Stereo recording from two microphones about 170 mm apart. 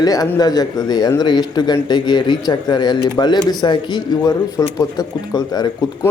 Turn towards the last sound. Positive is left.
turn(degrees=20)  # may be behind; listen again after turning